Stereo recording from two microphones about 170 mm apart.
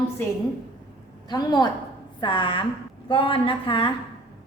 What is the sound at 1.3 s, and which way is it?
A woman's voice, 25° left (ahead or behind).